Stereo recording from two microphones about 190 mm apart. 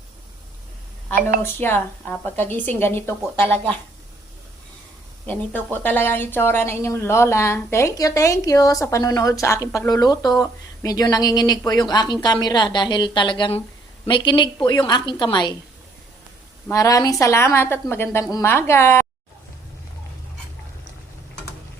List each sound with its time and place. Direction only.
1.4 s a woman's voice: 10° left (ahead or behind)
5.2 s a woman's voice: 10° left (ahead or behind)
16.6 s a woman's voice: 15° left (ahead or behind)